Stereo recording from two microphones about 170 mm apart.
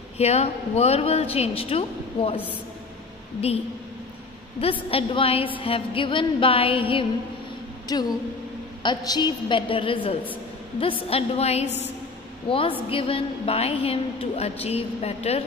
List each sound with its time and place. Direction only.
0.2 s a woman's voice: 40° left (ahead or behind)
4.6 s a woman's voice: 35° left (ahead or behind)